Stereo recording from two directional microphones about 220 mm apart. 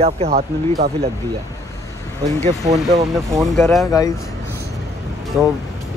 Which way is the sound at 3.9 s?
15° left (ahead or behind).